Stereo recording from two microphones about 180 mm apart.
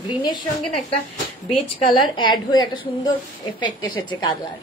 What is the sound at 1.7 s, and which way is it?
A woman's voice, 25° left (ahead or behind).